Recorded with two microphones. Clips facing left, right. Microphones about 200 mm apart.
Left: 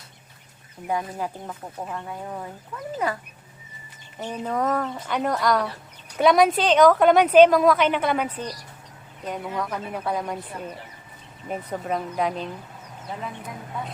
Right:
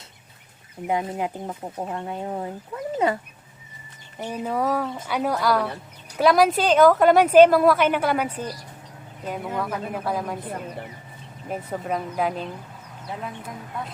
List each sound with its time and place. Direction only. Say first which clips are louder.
0.9 s speech: right 2 dB; 20° right (ahead or behind)
4.2 s a woman's voice: right 1 dB; 10° right (ahead or behind)
11.4 s a woman's voice: even; centre (ahead or behind)